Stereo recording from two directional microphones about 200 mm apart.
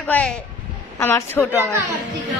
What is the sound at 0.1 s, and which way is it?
A woman's voice, 10° left (ahead or behind).